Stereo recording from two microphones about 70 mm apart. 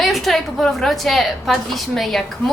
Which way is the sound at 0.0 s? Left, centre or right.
Centre.